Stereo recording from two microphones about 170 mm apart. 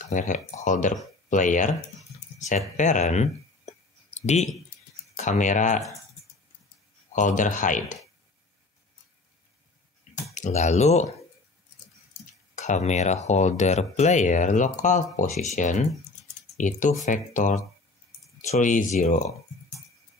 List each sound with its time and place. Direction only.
0.0 s speech: 50° left (ahead or behind)
2.8 s speech: 45° left (ahead or behind)
5.1 s speech: 45° left (ahead or behind)
7.1 s speech: 45° left (ahead or behind)
10.3 s speech: 45° left (ahead or behind)
12.5 s speech: 45° left (ahead or behind)